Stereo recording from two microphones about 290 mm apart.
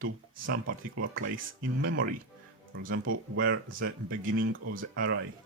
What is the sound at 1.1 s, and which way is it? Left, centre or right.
Speech, right.